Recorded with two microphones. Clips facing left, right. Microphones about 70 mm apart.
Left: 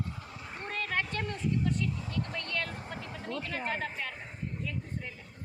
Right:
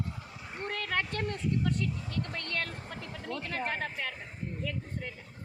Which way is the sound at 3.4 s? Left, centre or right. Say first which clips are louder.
Right 1 dB; right.